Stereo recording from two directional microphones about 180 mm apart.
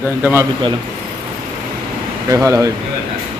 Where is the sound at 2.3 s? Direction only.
20° right (ahead or behind).